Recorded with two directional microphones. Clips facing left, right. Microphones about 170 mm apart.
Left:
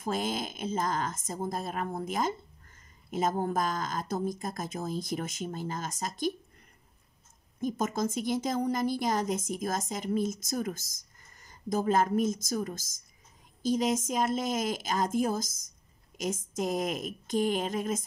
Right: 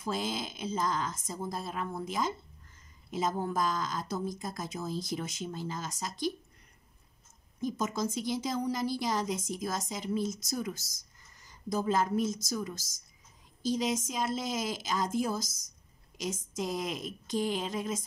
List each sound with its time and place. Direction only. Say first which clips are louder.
0.0 s a woman's voice: left 2 dB; 50° left (ahead or behind)
7.6 s a woman's voice: left 2 dB; 50° left (ahead or behind)
16.5 s a woman's voice: left 4 dB; 50° left (ahead or behind)